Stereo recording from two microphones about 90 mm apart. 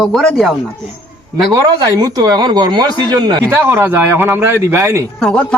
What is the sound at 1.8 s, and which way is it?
A man's voice, 45° right (ahead or behind).